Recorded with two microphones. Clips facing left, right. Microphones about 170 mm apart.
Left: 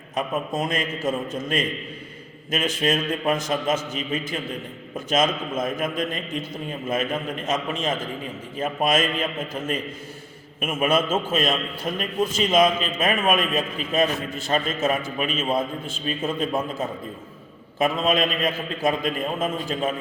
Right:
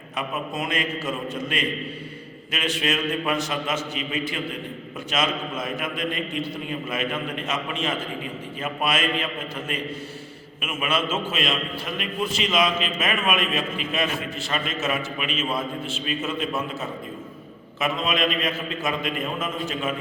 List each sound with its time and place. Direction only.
0.2 s a man's voice: 45° left (ahead or behind)
14.8 s a man's voice: 35° left (ahead or behind)
15.3 s a man's voice: 50° left (ahead or behind)
16.0 s a man's voice: 35° left (ahead or behind)
16.5 s a man's voice: 50° left (ahead or behind)
18.8 s a man's voice: 30° left (ahead or behind)